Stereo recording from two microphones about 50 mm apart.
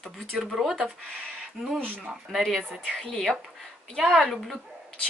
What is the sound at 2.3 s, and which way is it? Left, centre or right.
Speech, centre.